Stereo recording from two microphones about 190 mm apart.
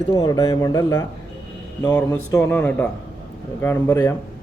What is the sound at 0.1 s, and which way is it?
Speech, 20° left (ahead or behind).